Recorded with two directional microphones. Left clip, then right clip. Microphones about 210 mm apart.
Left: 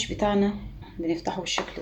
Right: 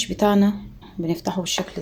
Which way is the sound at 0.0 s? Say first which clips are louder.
Right 5 dB; 45° right (ahead or behind).